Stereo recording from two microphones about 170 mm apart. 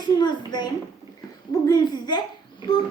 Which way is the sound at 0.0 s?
25° left (ahead or behind).